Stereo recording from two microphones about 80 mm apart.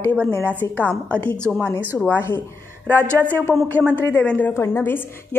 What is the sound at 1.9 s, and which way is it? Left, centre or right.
Speech, centre.